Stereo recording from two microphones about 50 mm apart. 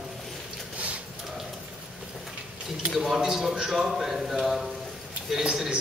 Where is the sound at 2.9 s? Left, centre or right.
Centre.